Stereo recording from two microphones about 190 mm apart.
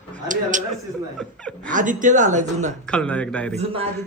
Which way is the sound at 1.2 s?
5° left (ahead or behind).